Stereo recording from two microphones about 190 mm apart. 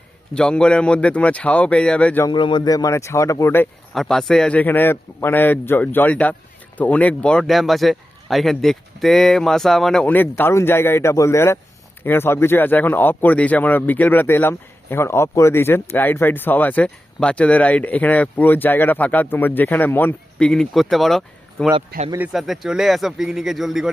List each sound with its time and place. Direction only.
0.3 s speech: 5° left (ahead or behind)
2.2 s speech: 25° left (ahead or behind); by 21.7 s centre (ahead or behind)
21.8 s speech: 35° right (ahead or behind)
22.3 s speech: centre (ahead or behind)